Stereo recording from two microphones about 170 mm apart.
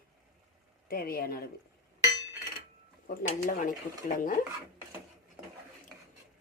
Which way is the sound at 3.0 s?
55° left (ahead or behind).